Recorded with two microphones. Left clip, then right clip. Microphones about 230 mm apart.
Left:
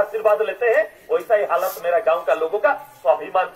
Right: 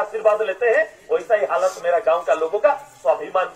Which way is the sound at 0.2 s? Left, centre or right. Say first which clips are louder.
Right 3 dB; left.